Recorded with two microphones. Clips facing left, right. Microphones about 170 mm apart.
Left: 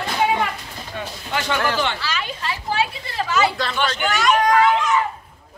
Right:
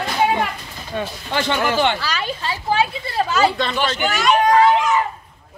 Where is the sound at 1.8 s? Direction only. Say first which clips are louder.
Right 5 dB; 55° right (ahead or behind).